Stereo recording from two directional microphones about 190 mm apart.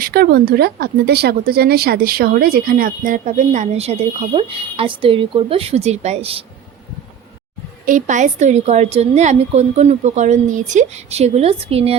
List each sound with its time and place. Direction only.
0.0 s speech: 55° right (ahead or behind); by 6.4 s 30° right (ahead or behind)
7.9 s a woman's voice: 40° right (ahead or behind)